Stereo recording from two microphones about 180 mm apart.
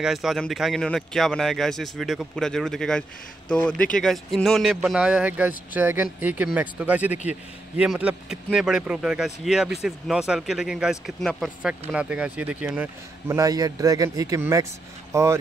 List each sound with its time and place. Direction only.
0.0 s speech: centre (ahead or behind)
13.4 s speech: 20° right (ahead or behind)